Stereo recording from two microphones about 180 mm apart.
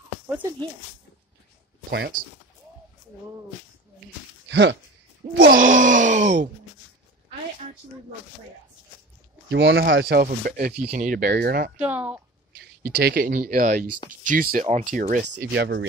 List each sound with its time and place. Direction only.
1.9 s speech: 65° right (ahead or behind)
4.5 s speech: 85° right
5.4 s speech: 50° right (ahead or behind)
9.5 s speech: 85° right
10.2 s speech: 55° right (ahead or behind)
11.7 s speech: 5° right (ahead or behind)
12.5 s speech: 60° right (ahead or behind)
14.6 s speech: 40° right (ahead or behind)
15.3 s speech: 75° right (ahead or behind)